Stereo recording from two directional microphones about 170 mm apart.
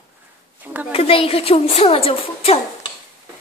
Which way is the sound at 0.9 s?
35° left (ahead or behind).